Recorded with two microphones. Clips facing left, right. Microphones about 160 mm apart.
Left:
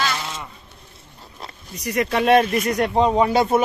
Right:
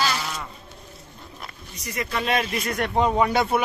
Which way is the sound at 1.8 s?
60° left (ahead or behind).